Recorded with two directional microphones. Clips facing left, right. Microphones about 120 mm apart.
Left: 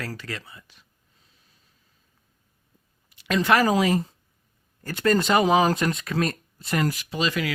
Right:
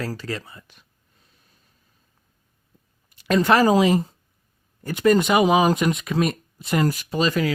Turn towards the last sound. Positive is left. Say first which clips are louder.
# right 5 dB
turn(degrees=-40)  # may be behind; listen again after turning